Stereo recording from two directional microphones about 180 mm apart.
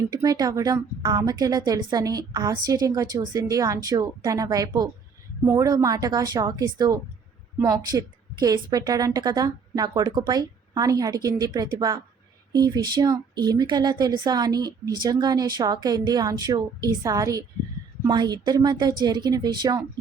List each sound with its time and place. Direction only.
0.1 s speech: 20° right (ahead or behind)